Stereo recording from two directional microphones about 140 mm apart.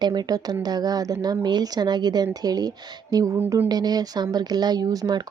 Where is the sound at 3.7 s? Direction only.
30° right (ahead or behind).